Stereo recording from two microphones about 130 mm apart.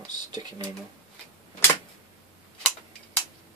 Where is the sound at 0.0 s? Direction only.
35° right (ahead or behind).